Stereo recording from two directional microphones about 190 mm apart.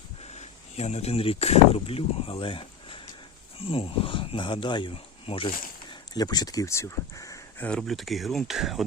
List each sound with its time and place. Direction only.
0.2 s speech: 35° left (ahead or behind); by 7.7 s 15° left (ahead or behind)
7.7 s speech: centre (ahead or behind)